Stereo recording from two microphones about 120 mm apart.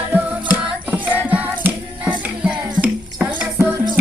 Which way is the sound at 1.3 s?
10° right (ahead or behind).